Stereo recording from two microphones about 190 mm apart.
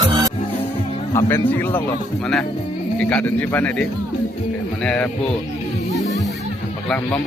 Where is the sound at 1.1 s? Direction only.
15° left (ahead or behind).